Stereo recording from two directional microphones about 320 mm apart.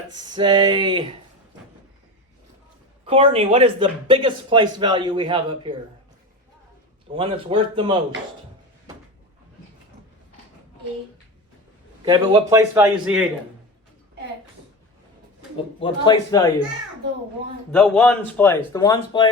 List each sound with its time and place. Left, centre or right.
0.2 s speech: centre
3.1 s speech: centre
7.1 s speech: centre
12.0 s speech: centre
15.5 s speech: centre
17.7 s speech: centre